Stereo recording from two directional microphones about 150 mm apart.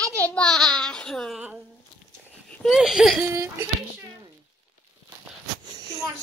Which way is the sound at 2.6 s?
Centre (ahead or behind).